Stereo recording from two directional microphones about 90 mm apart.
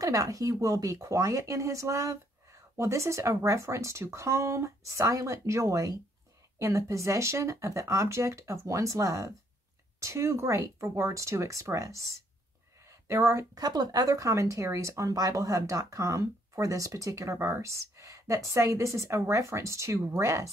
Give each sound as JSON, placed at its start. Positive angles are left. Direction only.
{"t": 0.0, "sound": "speech", "side_deg": -40}
{"t": 12.8, "sound": "a sound", "side_deg": -30}
{"t": 13.6, "sound": "speech", "side_deg": -45}